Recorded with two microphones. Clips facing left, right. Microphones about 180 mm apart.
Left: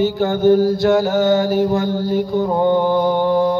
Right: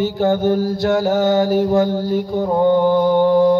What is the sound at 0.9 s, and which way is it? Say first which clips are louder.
Mantra: right 1 dB; 40° right (ahead or behind).